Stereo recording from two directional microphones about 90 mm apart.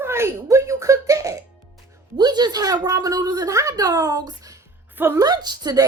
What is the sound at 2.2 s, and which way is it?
A woman's voice, 50° right (ahead or behind).